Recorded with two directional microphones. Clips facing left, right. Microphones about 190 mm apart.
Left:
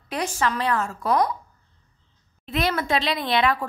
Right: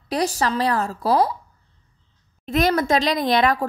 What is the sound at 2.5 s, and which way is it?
A woman's voice, 45° right (ahead or behind).